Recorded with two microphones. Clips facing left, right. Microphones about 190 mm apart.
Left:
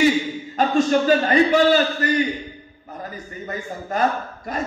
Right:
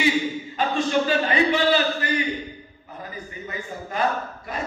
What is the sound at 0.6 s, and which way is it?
A man's voice, 45° left (ahead or behind).